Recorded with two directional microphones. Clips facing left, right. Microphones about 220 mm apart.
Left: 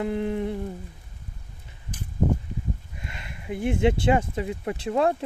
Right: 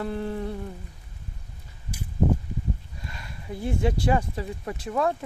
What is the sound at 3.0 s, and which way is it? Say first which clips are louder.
Speech: left 1 dB; 20° left (ahead or behind).